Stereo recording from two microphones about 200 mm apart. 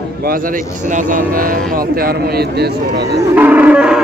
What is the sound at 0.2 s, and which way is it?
Speech, 45° right (ahead or behind).